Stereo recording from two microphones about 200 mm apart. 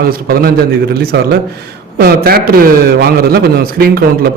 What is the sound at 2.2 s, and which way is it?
A man's voice, 50° right (ahead or behind).